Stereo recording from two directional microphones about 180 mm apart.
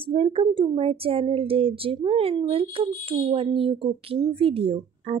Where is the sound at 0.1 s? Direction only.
30° right (ahead or behind).